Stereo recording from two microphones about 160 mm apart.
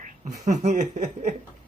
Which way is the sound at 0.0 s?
50° right (ahead or behind).